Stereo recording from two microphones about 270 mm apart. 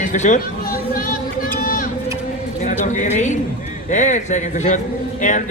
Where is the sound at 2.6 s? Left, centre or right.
Left.